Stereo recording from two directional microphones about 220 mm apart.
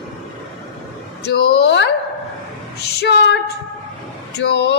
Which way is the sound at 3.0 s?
50° left (ahead or behind).